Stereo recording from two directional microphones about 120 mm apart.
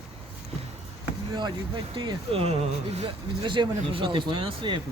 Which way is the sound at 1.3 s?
40° right (ahead or behind).